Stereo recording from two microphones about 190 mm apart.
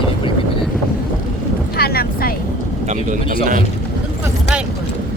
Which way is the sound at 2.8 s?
40° right (ahead or behind).